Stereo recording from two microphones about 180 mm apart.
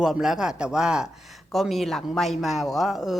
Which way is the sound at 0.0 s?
Centre (ahead or behind).